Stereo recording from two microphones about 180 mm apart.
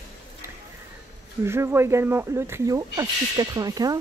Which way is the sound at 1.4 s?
15° right (ahead or behind).